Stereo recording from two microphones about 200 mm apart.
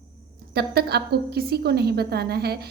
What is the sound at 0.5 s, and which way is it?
A woman's voice, 55° right (ahead or behind).